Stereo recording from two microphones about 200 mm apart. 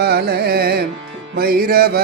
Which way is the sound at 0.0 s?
50° right (ahead or behind).